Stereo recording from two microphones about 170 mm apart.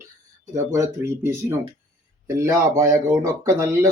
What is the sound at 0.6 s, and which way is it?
Speech, 15° right (ahead or behind).